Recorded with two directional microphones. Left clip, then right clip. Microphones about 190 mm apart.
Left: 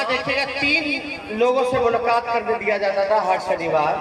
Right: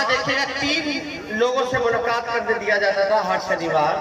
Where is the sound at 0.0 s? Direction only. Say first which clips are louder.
Right 1 dB; 10° left (ahead or behind).